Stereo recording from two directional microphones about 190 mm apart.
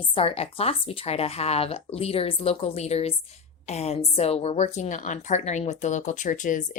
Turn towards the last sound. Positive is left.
turn(degrees=45)  # may be behind; listen again after turning